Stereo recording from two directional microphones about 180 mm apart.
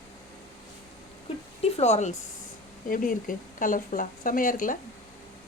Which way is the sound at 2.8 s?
50° left (ahead or behind).